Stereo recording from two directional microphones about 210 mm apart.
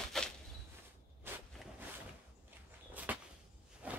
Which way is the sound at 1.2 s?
10° right (ahead or behind).